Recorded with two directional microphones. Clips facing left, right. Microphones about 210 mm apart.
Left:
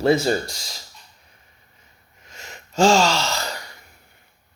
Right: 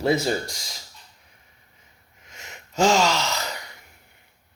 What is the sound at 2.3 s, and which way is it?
Gasp, 35° left (ahead or behind).